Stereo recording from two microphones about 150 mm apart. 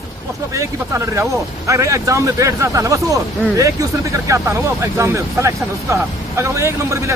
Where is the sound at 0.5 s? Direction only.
20° right (ahead or behind).